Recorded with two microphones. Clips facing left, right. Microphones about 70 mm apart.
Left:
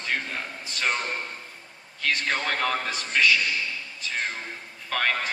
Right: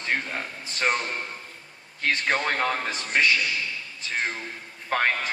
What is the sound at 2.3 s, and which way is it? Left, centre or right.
Speech, right.